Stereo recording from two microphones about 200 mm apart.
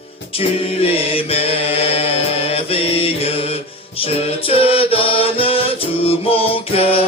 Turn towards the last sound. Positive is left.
turn(degrees=30)  # may be behind; listen again after turning